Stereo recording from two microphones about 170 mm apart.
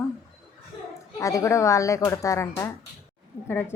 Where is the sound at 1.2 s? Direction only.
20° left (ahead or behind).